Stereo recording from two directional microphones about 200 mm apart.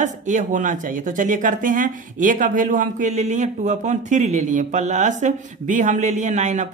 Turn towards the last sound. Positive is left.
turn(degrees=-35)  # may be behind; listen again after turning